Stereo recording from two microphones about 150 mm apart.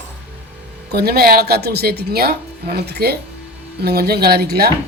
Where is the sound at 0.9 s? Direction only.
90° right.